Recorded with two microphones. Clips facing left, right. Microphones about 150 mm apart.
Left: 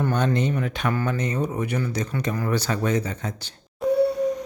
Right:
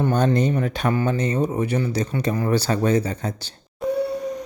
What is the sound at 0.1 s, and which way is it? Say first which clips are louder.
Speech: right 3 dB; 35° right (ahead or behind).